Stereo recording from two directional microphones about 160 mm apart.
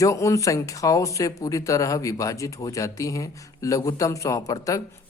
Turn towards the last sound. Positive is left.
turn(degrees=20)  # may be behind; listen again after turning